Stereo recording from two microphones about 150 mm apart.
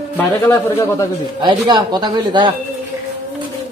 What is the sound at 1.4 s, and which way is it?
Speech, 30° right (ahead or behind).